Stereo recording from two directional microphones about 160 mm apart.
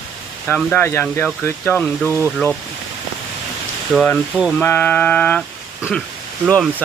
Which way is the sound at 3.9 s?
10° left (ahead or behind).